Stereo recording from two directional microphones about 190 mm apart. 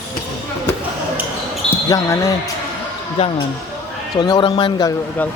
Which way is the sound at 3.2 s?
30° left (ahead or behind).